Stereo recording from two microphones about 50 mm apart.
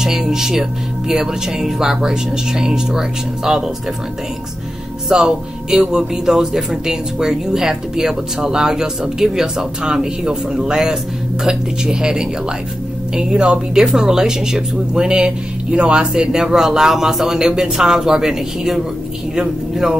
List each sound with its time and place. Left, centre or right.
0.0 s speech: centre
5.1 s speech: centre